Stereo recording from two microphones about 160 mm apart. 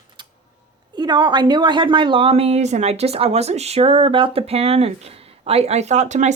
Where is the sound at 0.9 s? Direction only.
25° right (ahead or behind).